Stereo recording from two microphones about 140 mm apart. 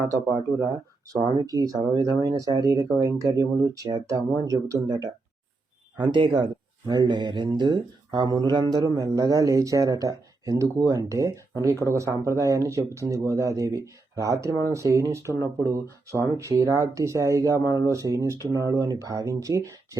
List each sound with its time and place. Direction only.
0.3 s speech: 25° right (ahead or behind)